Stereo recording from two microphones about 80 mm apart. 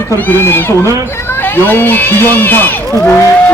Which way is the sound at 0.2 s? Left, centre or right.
Left.